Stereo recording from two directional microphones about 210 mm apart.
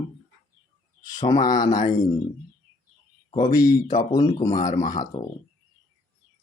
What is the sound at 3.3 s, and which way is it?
Speech, 20° left (ahead or behind).